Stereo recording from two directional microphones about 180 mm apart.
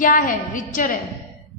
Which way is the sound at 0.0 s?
50° left (ahead or behind).